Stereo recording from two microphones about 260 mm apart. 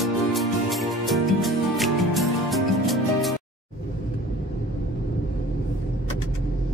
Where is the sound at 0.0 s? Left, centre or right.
Centre.